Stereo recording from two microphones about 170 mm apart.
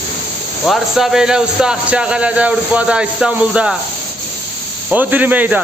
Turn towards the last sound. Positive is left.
turn(degrees=-10)  # may be behind; listen again after turning